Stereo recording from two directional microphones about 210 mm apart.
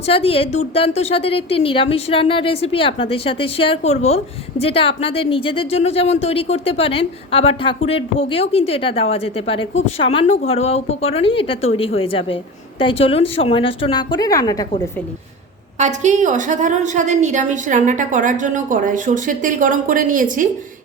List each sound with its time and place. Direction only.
0.0 s a woman's voice: 25° left (ahead or behind)
15.8 s a woman's voice: 35° right (ahead or behind)